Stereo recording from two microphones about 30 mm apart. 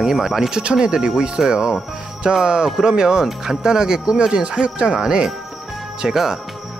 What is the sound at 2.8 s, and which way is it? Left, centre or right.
Speech, right.